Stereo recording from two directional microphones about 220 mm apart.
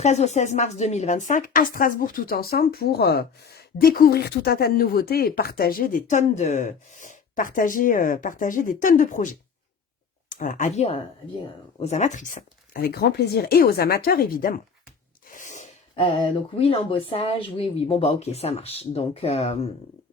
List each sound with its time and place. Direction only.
0.0 s speech: 30° left (ahead or behind)